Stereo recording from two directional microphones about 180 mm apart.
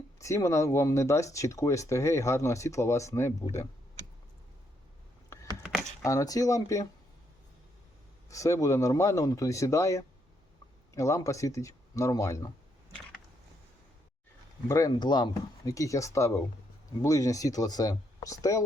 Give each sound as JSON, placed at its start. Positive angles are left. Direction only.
{"t": 0.2, "sound": "speech", "side_deg": 15}
{"t": 5.3, "sound": "a sound", "side_deg": 15}
{"t": 6.0, "sound": "speech", "side_deg": 20}
{"t": 8.3, "sound": "speech", "side_deg": 15}
{"t": 14.7, "sound": "speech", "side_deg": 20}